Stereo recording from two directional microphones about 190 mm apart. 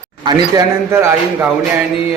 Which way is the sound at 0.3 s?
20° right (ahead or behind).